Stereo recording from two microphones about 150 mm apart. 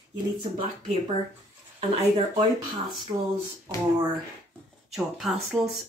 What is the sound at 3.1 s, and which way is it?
Speech, 30° right (ahead or behind).